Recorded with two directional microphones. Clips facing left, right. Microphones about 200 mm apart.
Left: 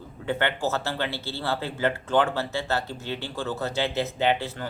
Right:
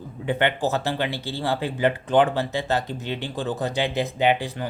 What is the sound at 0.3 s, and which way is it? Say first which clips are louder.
Speech: right 3 dB; 15° right (ahead or behind).